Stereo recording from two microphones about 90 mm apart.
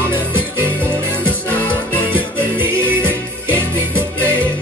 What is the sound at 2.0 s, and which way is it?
Music, 25° right (ahead or behind).